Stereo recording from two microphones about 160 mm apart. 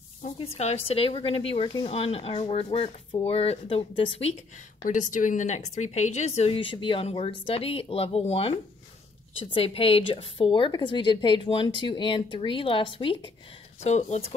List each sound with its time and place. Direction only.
0.4 s speech: 40° left (ahead or behind)
4.8 s speech: 50° left (ahead or behind); by 13.3 s 35° left (ahead or behind)
13.7 s speech: 45° left (ahead or behind)